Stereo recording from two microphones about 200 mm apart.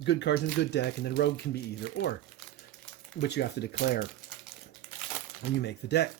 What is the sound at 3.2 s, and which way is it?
Speech, 55° left (ahead or behind).